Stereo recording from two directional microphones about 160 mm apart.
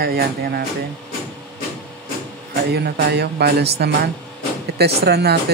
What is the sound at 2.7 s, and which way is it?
Speech, 85° right.